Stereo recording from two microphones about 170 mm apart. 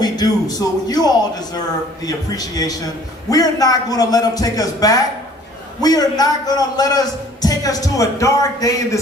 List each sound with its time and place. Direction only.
0.0 s a man's voice: 20° left (ahead or behind)